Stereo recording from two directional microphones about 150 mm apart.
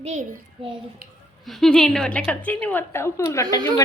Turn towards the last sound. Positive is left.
turn(degrees=20)  # may be behind; listen again after turning